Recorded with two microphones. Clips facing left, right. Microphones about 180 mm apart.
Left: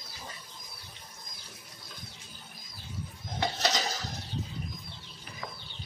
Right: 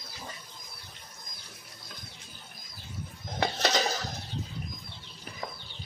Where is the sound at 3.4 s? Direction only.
60° right (ahead or behind).